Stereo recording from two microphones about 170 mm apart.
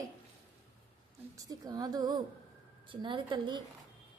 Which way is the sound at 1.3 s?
20° right (ahead or behind).